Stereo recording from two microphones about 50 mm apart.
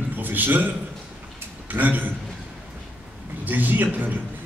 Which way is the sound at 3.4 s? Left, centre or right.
Right.